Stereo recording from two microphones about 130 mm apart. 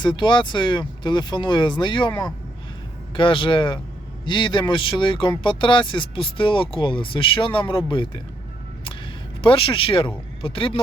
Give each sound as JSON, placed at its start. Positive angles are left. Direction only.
{"t": 0.0, "sound": "speech", "side_deg": 35}
{"t": 9.4, "sound": "a man's voice", "side_deg": 45}